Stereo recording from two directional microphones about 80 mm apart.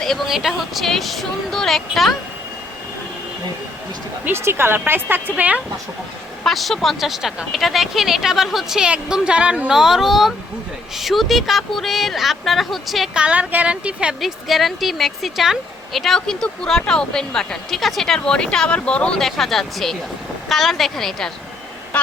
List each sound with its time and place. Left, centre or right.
0.3 s speech: centre
4.3 s speech: right
6.4 s speech: centre
13.1 s a woman's voice: centre
14.2 s speech: centre